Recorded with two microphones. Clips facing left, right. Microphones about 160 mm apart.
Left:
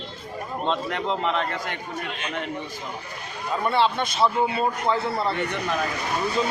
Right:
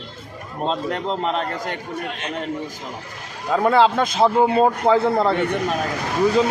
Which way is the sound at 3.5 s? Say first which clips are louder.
Right 6 dB; 90° right.